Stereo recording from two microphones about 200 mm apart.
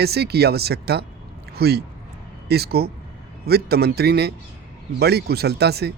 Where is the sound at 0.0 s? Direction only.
55° right (ahead or behind).